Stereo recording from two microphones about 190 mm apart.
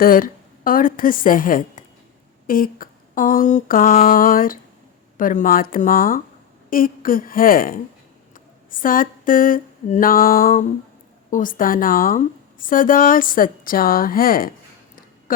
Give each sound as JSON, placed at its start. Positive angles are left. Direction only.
{"t": 0.0, "sound": "a woman's voice", "side_deg": 50}